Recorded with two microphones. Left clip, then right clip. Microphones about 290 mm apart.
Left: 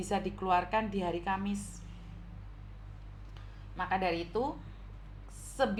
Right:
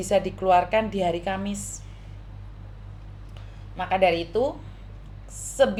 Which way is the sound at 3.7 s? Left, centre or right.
Centre.